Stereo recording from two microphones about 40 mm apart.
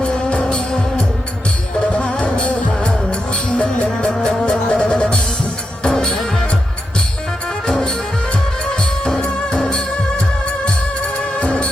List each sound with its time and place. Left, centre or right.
0.0 s music: left
1.9 s music: left
3.8 s music: left
7.7 s music: centre
9.1 s music: centre
11.0 s music: left